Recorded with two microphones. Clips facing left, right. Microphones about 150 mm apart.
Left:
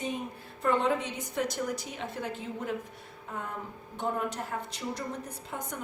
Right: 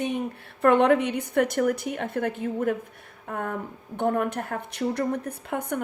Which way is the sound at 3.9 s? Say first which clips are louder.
Right 7 dB; 60° right (ahead or behind).